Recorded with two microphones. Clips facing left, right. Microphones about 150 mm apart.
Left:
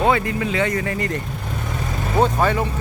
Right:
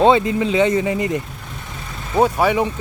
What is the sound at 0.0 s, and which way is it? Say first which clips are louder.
Speech: right 5 dB; 20° right (ahead or behind).